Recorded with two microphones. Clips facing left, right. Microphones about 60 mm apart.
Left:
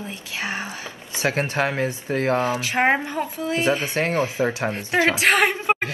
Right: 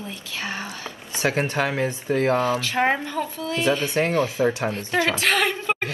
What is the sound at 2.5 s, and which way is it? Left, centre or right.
A woman's voice, centre.